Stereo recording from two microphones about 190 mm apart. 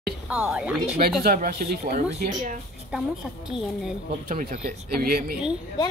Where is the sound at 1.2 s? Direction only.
50° right (ahead or behind).